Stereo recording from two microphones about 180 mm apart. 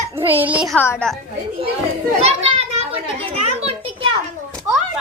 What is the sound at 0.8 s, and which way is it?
Speech, 10° left (ahead or behind).